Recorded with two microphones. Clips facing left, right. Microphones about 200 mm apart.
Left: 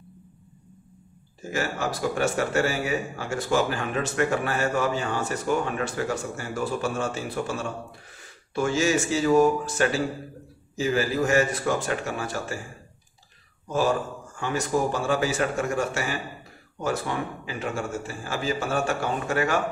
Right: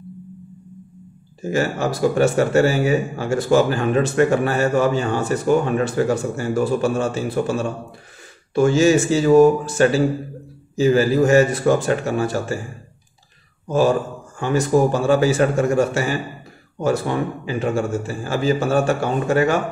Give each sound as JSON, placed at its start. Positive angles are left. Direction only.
{"t": 1.5, "sound": "a man's voice", "side_deg": -30}
{"t": 14.4, "sound": "a man's voice", "side_deg": -30}